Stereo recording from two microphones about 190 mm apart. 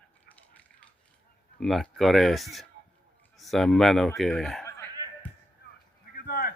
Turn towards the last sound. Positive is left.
turn(degrees=50)  # may be behind; listen again after turning